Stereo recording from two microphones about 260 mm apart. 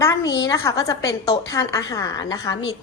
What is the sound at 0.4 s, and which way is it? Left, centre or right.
A woman's voice, centre.